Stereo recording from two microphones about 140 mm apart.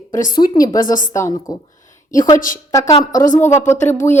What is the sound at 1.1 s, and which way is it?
A woman's voice, 20° left (ahead or behind).